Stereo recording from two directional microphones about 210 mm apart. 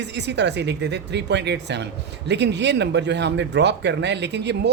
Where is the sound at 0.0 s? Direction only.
55° right (ahead or behind).